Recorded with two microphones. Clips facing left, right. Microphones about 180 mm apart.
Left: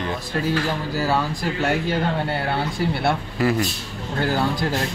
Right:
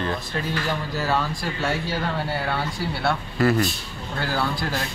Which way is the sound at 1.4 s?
20° left (ahead or behind).